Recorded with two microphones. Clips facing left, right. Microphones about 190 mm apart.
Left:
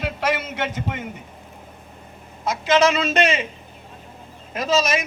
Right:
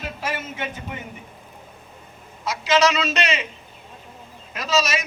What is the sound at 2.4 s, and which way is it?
A man's voice, 55° left (ahead or behind).